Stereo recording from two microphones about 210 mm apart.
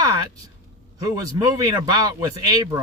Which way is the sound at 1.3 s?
20° right (ahead or behind).